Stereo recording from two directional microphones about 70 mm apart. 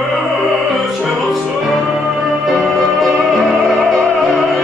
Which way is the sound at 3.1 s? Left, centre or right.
Centre.